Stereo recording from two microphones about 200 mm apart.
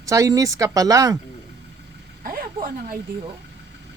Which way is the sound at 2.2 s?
45° right (ahead or behind).